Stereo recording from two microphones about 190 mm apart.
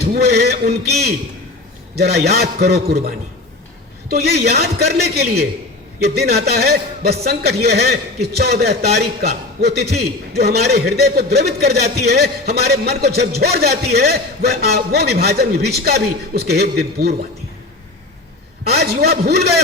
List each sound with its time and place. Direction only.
0.0 s a man's voice: 55° right (ahead or behind)
2.0 s a man's voice: 55° right (ahead or behind)
4.1 s a man's voice: 55° right (ahead or behind)
18.6 s a man's voice: 55° right (ahead or behind)